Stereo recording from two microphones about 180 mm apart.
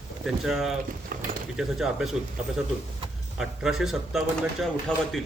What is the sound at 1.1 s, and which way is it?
Speech, 55° right (ahead or behind).